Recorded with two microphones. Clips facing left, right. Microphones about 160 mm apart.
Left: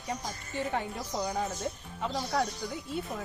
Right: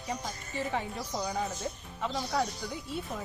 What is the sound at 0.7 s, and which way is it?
Speech, 5° left (ahead or behind).